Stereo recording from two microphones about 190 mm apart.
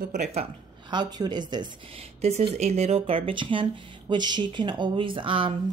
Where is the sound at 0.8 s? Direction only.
25° right (ahead or behind).